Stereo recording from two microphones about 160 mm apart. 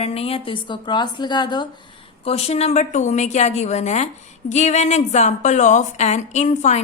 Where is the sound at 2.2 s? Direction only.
40° left (ahead or behind).